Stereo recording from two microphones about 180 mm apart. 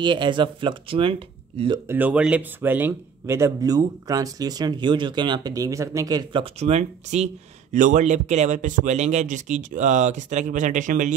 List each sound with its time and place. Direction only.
0.0 s speech: 25° right (ahead or behind)
1.9 s speech: 10° right (ahead or behind)
6.4 s speech: 35° right (ahead or behind)